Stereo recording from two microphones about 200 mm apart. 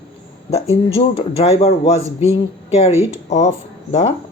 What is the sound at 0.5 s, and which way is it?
Speech, 30° left (ahead or behind).